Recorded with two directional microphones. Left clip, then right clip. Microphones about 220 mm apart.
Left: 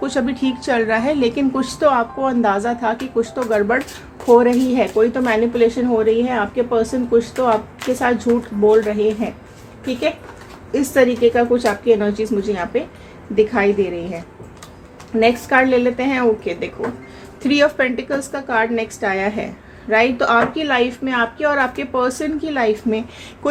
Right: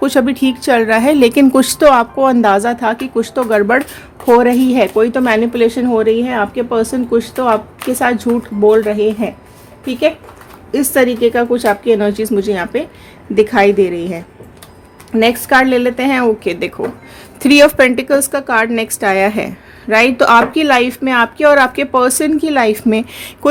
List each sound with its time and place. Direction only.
0.0 s a woman's voice: 40° right (ahead or behind)
10.7 s a woman's voice: 45° right (ahead or behind)
15.2 s a woman's voice: 50° right (ahead or behind)